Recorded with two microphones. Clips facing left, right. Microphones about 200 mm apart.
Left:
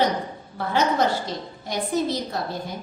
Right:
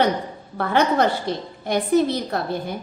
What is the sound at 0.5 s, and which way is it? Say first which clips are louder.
A woman's voice: right 3 dB; 60° right (ahead or behind).